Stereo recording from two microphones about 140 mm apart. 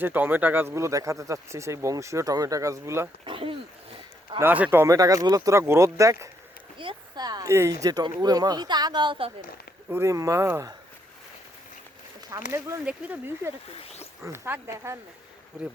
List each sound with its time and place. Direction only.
0.0 s speech: 15° right (ahead or behind)
3.2 s a sound: 40° right (ahead or behind)
4.4 s speech: 10° right (ahead or behind)
6.7 s speech: 35° right (ahead or behind)
9.9 s speech: 20° right (ahead or behind)
12.5 s speech: 20° right (ahead or behind)
12.8 s speech: 10° right (ahead or behind)
13.7 s speech: 45° left (ahead or behind)
14.3 s speech: 15° right (ahead or behind)